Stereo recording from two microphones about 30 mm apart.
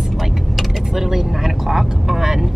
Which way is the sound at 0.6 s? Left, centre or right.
Centre.